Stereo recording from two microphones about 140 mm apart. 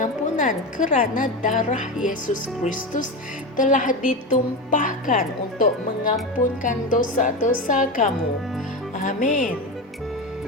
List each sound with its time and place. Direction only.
0.0 s a woman's voice: 70° left (ahead or behind)